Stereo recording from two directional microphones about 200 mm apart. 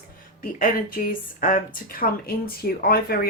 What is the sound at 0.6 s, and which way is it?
A woman's voice, 45° left (ahead or behind).